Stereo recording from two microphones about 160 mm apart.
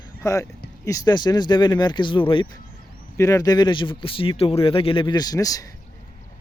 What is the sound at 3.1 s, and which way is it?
Speech, 20° left (ahead or behind).